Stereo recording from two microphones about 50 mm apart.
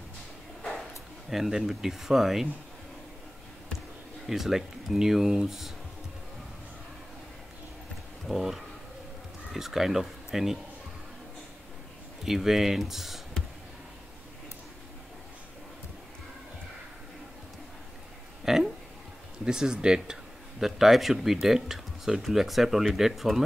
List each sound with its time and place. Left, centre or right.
1.3 s speech: centre
4.3 s speech: centre
8.3 s speech: centre
12.3 s speech: centre
18.4 s a sound: centre
19.4 s speech: centre
20.6 s speech: centre